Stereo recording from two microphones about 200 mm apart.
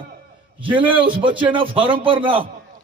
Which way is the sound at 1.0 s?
25° right (ahead or behind).